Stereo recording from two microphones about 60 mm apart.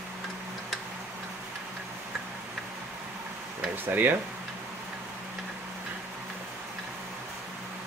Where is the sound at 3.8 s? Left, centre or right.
Right.